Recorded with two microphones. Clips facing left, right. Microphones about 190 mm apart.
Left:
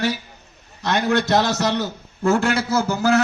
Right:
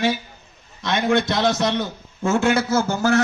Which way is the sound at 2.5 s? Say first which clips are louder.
Right 1 dB; 60° right (ahead or behind).